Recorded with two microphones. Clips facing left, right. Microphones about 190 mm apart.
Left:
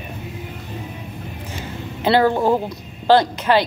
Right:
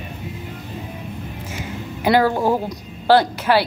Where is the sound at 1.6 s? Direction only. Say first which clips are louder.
Even; 10° right (ahead or behind).